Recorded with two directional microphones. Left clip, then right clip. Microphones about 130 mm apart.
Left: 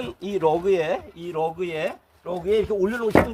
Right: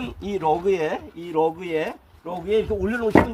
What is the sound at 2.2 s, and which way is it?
Speech, 90° left.